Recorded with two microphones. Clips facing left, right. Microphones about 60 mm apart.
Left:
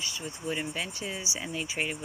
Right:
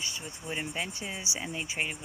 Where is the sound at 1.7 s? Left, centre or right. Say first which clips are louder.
Left 1 dB; centre.